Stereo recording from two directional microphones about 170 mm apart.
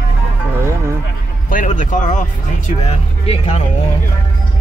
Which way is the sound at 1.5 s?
50° left (ahead or behind).